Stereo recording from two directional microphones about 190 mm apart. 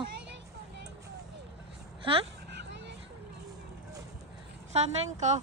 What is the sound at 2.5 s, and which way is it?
Vehicle, 65° right (ahead or behind).